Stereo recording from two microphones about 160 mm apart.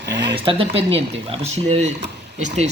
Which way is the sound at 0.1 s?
90° right.